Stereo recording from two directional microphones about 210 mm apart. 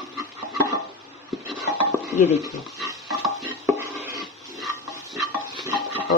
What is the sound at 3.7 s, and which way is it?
Stir, 10° right (ahead or behind).